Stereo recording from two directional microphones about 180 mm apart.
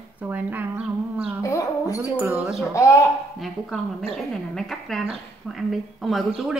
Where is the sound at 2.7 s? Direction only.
15° left (ahead or behind).